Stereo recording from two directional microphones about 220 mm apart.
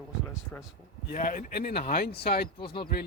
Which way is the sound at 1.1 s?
35° left (ahead or behind).